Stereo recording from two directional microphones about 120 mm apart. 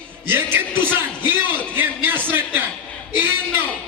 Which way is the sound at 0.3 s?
15° right (ahead or behind).